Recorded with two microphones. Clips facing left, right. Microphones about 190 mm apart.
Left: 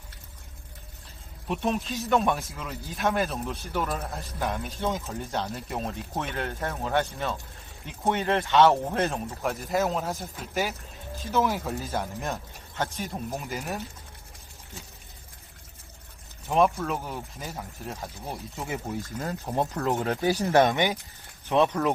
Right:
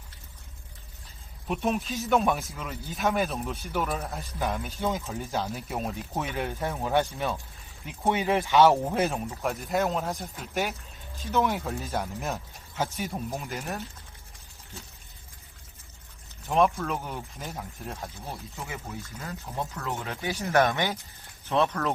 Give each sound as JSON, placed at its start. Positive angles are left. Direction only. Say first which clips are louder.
{"t": 1.5, "sound": "speech", "louder": "even", "side_deg": -5}
{"t": 16.5, "sound": "speech", "louder": "left 1 dB", "side_deg": 0}
{"t": 18.3, "sound": "speech", "louder": "left 6 dB", "side_deg": 15}
{"t": 19.0, "sound": "speech", "louder": "left 6 dB", "side_deg": 45}